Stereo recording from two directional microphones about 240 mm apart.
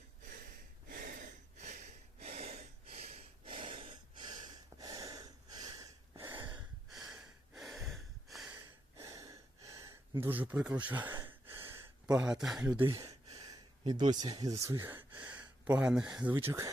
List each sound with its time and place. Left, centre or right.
0.9 s a sound: right; by 6.6 s centre
6.6 s snort: centre
10.8 s speech: centre
11.1 s gasp: centre